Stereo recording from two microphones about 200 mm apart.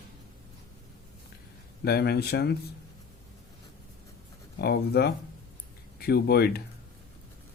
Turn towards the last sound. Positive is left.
turn(degrees=55)  # may be behind; listen again after turning